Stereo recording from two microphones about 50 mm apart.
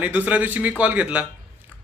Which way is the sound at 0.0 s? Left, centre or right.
Right.